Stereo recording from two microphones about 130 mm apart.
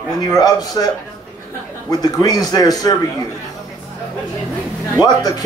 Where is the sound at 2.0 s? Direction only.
30° left (ahead or behind).